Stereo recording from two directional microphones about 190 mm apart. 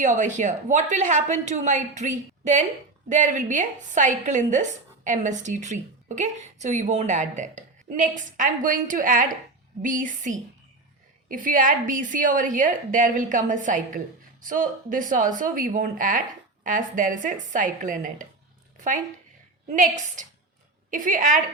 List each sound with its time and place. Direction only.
0.0 s a woman's voice: 40° right (ahead or behind)